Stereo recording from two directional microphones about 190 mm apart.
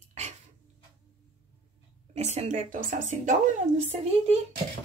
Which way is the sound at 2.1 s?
35° right (ahead or behind).